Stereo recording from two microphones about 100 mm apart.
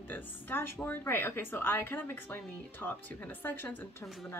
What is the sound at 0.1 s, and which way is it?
Speech, 20° left (ahead or behind).